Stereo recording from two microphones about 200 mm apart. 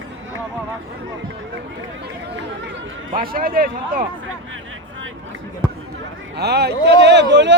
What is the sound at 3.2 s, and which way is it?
Speech, 45° right (ahead or behind).